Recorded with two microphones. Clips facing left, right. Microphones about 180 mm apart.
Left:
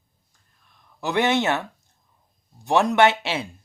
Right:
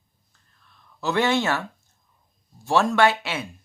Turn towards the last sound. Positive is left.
turn(degrees=25)  # may be behind; listen again after turning